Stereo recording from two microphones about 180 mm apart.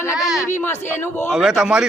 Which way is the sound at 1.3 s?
5° right (ahead or behind).